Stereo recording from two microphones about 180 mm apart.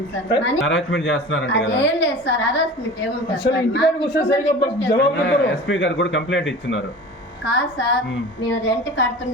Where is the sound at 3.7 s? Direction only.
85° left.